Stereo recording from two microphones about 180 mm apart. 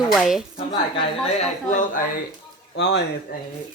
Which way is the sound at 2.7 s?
70° left (ahead or behind).